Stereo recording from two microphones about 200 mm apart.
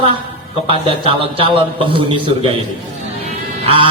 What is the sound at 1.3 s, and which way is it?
A man's voice, 25° right (ahead or behind).